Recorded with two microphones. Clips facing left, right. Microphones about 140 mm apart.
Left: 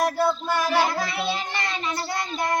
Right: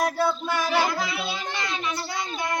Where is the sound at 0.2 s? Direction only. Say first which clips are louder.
Left 2 dB; centre (ahead or behind).